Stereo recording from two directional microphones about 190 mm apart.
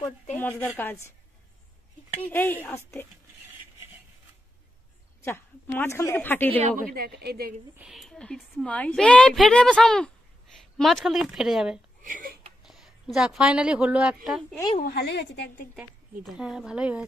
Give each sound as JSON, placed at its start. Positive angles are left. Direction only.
{"t": 0.4, "sound": "a woman's voice", "side_deg": 10}
{"t": 2.2, "sound": "a woman's voice", "side_deg": 10}
{"t": 5.2, "sound": "a woman's voice", "side_deg": 10}
{"t": 6.9, "sound": "speech", "side_deg": -55}
{"t": 7.7, "sound": "a woman's voice", "side_deg": -5}
{"t": 12.0, "sound": "speech", "side_deg": -45}
{"t": 12.6, "sound": "a woman's voice", "side_deg": 0}
{"t": 14.8, "sound": "a woman's voice", "side_deg": 55}
{"t": 16.3, "sound": "a woman's voice", "side_deg": -5}